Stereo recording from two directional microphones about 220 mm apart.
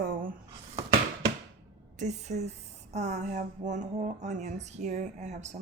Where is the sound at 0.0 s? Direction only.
40° right (ahead or behind).